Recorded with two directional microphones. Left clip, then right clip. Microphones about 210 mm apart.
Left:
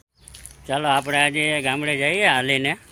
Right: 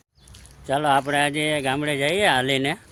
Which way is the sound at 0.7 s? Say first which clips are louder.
Even; 10° right (ahead or behind).